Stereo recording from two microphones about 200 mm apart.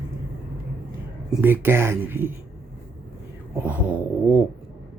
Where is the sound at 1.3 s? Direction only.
10° right (ahead or behind).